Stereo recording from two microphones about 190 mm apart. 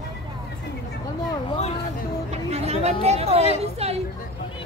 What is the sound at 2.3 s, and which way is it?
Chatter, 35° right (ahead or behind).